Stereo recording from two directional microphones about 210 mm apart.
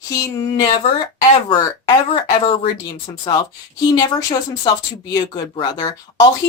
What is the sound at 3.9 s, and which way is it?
A woman's voice, 20° left (ahead or behind).